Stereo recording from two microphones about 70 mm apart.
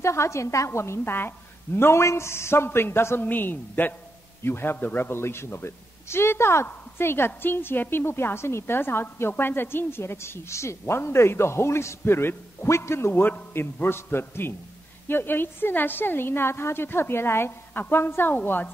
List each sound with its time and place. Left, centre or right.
0.0 s a man's voice: left